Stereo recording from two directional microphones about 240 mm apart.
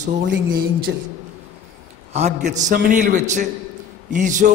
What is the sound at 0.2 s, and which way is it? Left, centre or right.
Speech, right.